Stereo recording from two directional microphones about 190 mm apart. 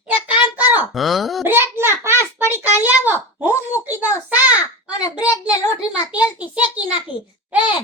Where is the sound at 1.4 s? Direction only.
10° right (ahead or behind).